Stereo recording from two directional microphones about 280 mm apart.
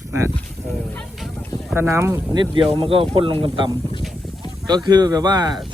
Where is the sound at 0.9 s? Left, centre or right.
Centre.